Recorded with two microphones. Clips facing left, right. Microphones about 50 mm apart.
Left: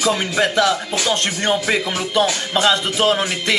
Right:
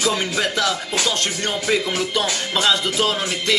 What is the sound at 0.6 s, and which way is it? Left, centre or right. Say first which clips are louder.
Speech: left 4 dB; left.